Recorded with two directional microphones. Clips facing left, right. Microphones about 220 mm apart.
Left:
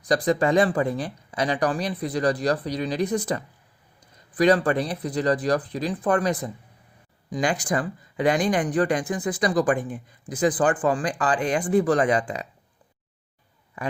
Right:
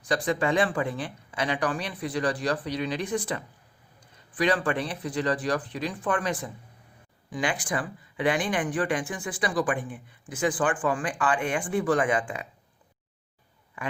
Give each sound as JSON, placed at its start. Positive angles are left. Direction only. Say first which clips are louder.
{"t": 0.0, "sound": "speech", "louder": "left 5 dB", "side_deg": 40}
{"t": 13.8, "sound": "speech", "louder": "left 4 dB", "side_deg": 40}